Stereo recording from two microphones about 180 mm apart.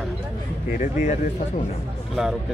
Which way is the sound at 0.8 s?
45° left (ahead or behind).